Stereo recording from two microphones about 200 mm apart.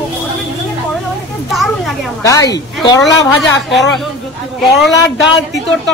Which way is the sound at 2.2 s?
15° left (ahead or behind).